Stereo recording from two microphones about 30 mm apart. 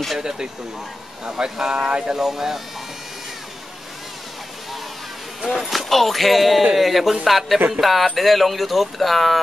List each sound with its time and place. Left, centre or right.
0.2 s speech: right
2.1 s speech: centre
5.4 s speech: centre
5.7 s speech: centre